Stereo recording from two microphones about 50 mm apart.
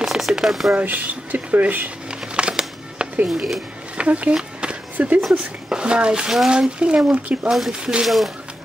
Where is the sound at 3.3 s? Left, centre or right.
Centre.